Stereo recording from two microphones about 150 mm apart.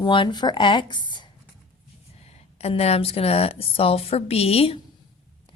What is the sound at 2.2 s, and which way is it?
A woman's voice, 45° left (ahead or behind).